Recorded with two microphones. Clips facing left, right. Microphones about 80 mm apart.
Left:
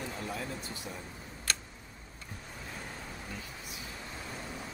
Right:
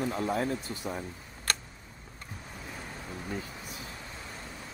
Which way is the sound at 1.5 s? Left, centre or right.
Right.